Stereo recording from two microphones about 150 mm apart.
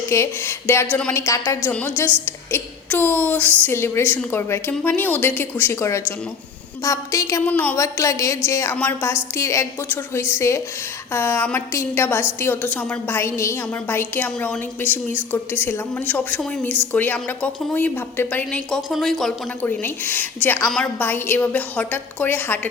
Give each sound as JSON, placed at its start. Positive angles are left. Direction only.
{"t": 0.1, "sound": "a woman's voice", "side_deg": 15}
{"t": 19.6, "sound": "a woman's voice", "side_deg": 15}